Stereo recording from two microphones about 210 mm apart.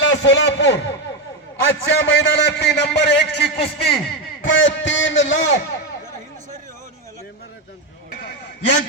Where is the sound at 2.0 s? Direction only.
55° left (ahead or behind).